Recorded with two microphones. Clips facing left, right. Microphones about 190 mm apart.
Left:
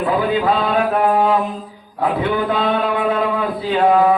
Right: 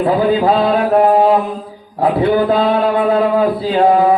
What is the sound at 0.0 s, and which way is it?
A man's voice, 35° right (ahead or behind).